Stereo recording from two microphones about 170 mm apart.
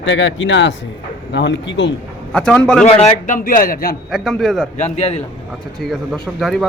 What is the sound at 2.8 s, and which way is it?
A man's voice, 50° left (ahead or behind).